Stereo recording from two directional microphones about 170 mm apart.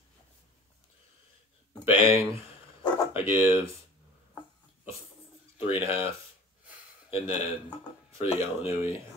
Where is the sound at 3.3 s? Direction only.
15° right (ahead or behind).